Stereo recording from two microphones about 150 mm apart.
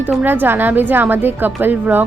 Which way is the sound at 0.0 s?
10° right (ahead or behind).